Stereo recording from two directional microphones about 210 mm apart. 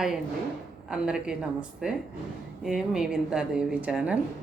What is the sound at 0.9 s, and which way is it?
A woman's voice, 5° right (ahead or behind).